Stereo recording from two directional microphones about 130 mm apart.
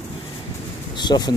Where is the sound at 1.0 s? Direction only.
35° left (ahead or behind).